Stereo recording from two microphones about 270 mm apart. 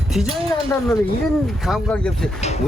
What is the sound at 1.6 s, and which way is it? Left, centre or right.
Speech, centre.